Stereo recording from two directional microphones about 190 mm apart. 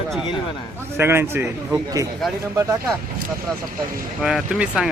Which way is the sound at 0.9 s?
10° right (ahead or behind).